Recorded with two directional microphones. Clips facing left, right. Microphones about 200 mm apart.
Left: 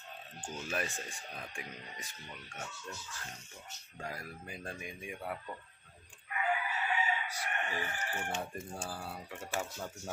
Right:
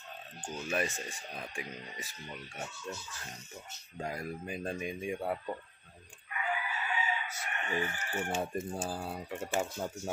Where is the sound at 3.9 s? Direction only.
20° right (ahead or behind).